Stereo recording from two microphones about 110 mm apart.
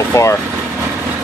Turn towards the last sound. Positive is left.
turn(degrees=25)  # may be behind; listen again after turning